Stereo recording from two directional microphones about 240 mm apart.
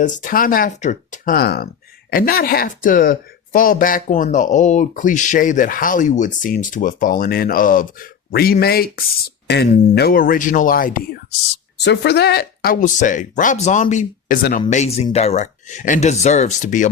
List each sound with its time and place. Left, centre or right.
0.0 s speech: left